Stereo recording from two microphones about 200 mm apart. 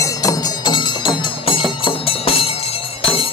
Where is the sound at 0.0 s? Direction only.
15° left (ahead or behind).